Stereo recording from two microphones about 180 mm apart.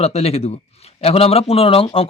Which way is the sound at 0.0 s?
35° left (ahead or behind).